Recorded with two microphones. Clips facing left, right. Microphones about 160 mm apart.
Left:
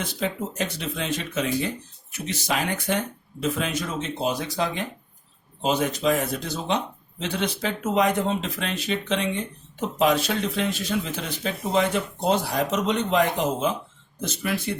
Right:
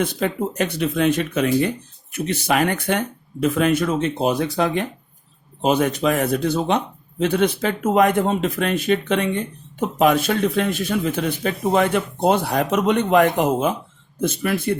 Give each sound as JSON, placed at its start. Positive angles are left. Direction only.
{"t": 0.0, "sound": "speech", "side_deg": -55}